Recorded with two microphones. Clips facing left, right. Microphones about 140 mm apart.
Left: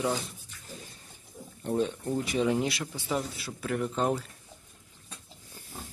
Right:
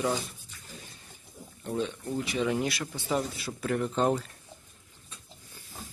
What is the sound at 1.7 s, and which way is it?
Speech, 40° left (ahead or behind).